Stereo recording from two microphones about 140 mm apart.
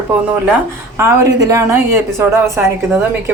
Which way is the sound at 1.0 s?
25° right (ahead or behind).